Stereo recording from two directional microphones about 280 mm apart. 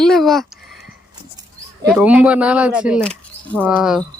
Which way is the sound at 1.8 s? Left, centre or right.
Centre.